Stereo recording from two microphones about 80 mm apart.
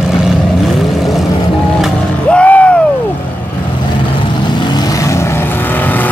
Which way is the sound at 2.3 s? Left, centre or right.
Centre.